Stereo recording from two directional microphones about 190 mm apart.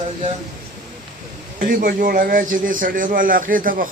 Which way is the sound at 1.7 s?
45° right (ahead or behind).